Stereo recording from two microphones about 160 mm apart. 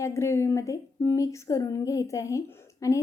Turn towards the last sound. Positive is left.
turn(degrees=20)  # may be behind; listen again after turning